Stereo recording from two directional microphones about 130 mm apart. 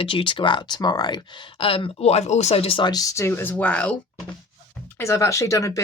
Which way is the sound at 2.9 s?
25° left (ahead or behind).